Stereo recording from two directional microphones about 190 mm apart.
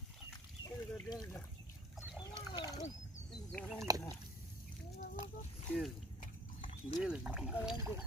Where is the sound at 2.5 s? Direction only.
20° left (ahead or behind).